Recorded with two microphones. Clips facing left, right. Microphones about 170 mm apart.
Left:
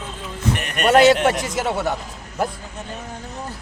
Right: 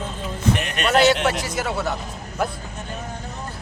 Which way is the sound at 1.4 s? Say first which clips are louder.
Left 2 dB; 20° left (ahead or behind).